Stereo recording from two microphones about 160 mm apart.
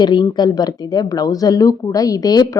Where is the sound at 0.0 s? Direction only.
30° left (ahead or behind).